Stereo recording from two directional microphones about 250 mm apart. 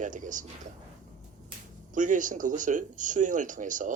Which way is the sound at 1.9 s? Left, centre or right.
Right.